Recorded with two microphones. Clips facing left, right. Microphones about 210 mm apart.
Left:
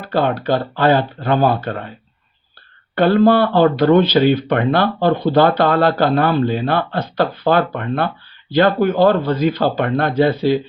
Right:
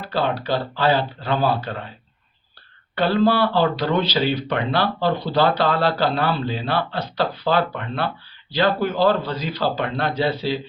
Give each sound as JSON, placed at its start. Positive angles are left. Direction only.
{"t": 0.0, "sound": "speech", "side_deg": 50}
{"t": 2.9, "sound": "speech", "side_deg": 50}